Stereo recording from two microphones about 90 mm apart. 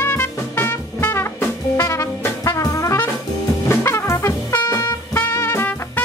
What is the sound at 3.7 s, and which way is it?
Music, 30° left (ahead or behind).